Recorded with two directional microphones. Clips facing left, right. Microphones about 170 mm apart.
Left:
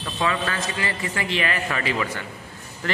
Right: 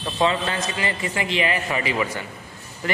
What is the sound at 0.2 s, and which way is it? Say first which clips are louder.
A man's voice: right 3 dB; 25° right (ahead or behind).